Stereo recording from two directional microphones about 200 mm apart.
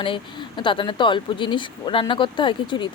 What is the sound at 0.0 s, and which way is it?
Speech, 25° left (ahead or behind).